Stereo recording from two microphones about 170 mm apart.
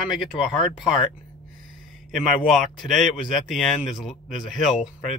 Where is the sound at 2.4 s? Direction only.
Centre (ahead or behind).